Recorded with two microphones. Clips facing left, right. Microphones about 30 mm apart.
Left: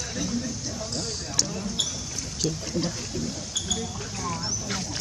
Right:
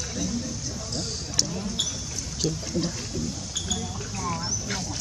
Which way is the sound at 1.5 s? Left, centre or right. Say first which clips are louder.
Even; centre.